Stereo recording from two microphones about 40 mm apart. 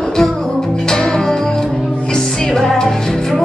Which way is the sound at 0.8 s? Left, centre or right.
Centre.